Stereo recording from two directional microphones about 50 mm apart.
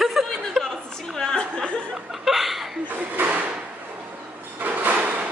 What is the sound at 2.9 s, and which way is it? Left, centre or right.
Speech, right.